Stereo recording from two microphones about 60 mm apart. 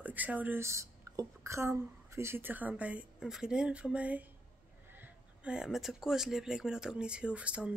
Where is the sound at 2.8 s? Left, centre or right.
Right.